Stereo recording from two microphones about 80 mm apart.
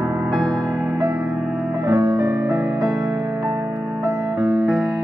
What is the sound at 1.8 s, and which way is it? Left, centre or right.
Music, right.